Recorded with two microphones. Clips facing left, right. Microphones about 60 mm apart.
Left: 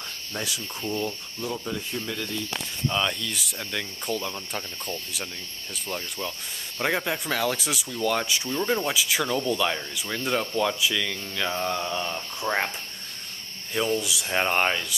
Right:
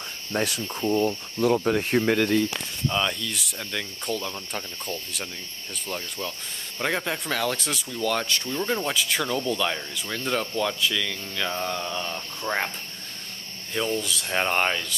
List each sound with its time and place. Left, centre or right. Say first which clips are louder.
0.3 s cricket: right 7 dB; right
0.8 s cricket: right 7 dB; centre
1.4 s speech: right 10 dB; right
2.9 s speech: right 1 dB; centre
13.7 s speech: left 1 dB; centre